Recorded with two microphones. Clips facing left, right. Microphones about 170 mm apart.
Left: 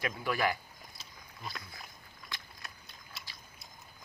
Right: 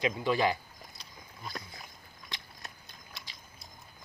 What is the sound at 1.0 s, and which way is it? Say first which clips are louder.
Wild animals: right 1 dB; 5° left (ahead or behind).